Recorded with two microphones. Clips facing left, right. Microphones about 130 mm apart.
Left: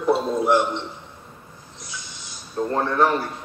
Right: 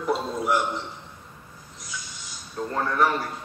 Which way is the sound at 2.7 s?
30° left (ahead or behind).